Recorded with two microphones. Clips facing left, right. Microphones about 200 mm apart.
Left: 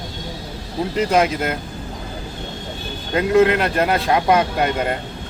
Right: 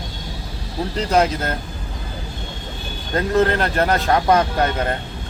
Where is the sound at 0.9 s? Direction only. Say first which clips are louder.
Left 1 dB; 10° left (ahead or behind).